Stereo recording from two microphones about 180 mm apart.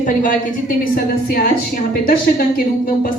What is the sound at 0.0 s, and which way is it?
Speech, 50° left (ahead or behind).